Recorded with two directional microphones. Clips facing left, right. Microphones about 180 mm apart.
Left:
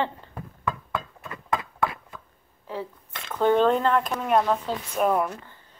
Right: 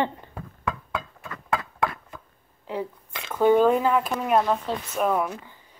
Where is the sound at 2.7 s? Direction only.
15° right (ahead or behind).